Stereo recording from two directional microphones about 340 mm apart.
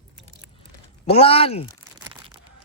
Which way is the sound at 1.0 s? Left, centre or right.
Centre.